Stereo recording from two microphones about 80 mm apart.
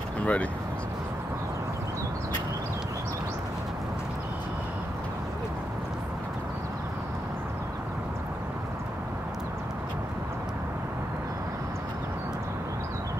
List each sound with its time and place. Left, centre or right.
0.2 s speech: centre